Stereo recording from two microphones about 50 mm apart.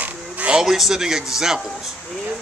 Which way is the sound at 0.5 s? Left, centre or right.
Centre.